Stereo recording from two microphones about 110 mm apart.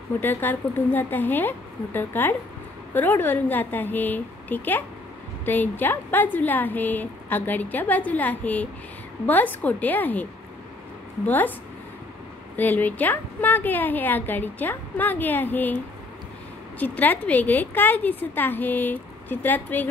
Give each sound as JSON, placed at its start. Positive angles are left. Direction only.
{"t": 0.2, "sound": "a woman's voice", "side_deg": 20}
{"t": 11.2, "sound": "a woman's voice", "side_deg": 15}
{"t": 12.5, "sound": "a woman's voice", "side_deg": 15}
{"t": 16.8, "sound": "a woman's voice", "side_deg": 15}